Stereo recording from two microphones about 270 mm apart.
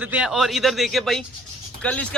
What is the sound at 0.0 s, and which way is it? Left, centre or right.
Speech, centre.